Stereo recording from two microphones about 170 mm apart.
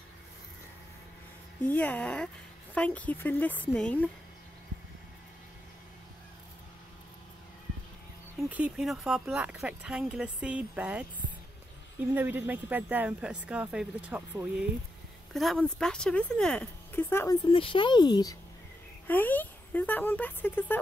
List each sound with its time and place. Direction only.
1.7 s speech: 10° left (ahead or behind)
8.5 s speech: 5° right (ahead or behind)
12.1 s speech: 10° right (ahead or behind)
15.3 s speech: centre (ahead or behind)
17.0 s speech: 15° left (ahead or behind)
17.5 s speech: 30° left (ahead or behind)
19.0 s speech: 10° left (ahead or behind)